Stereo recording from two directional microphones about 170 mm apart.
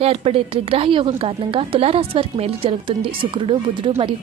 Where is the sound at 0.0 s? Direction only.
35° right (ahead or behind).